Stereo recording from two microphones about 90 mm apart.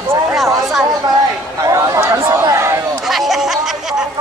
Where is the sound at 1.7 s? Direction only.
35° right (ahead or behind).